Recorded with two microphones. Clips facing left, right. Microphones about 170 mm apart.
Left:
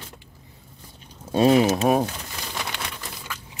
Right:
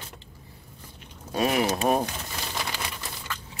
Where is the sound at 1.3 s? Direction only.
25° left (ahead or behind).